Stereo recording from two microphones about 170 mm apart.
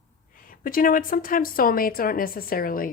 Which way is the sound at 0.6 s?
55° left (ahead or behind).